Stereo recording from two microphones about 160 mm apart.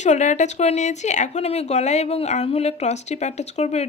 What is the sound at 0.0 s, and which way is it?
Speech, 50° left (ahead or behind).